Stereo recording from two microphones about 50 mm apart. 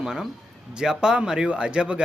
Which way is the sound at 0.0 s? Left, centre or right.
Centre.